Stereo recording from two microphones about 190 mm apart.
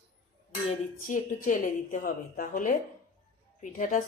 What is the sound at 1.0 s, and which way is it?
A woman's voice, 45° left (ahead or behind).